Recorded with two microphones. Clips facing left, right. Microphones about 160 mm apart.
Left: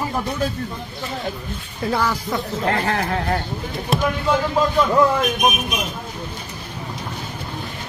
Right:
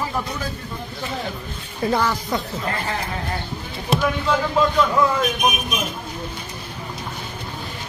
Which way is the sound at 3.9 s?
Centre (ahead or behind).